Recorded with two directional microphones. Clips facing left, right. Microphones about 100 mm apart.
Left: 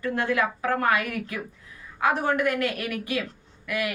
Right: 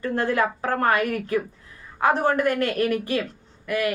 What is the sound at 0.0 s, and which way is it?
A woman's voice, 35° right (ahead or behind).